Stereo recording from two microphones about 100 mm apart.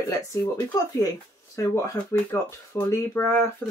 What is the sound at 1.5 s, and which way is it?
Speech, 30° left (ahead or behind).